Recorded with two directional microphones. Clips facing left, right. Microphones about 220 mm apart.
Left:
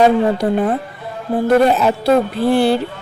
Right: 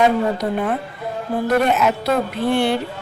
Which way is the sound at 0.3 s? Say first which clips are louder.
Left 5 dB; 35° left (ahead or behind).